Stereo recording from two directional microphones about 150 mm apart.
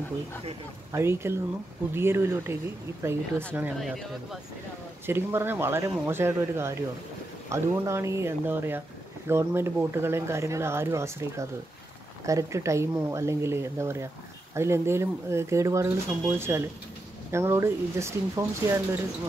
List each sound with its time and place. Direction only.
0.9 s speech: 15° right (ahead or behind)
3.8 s speech: centre (ahead or behind)
5.0 s speech: 15° right (ahead or behind)